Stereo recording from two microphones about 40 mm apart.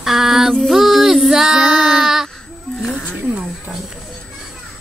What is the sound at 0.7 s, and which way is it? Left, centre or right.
Music, centre.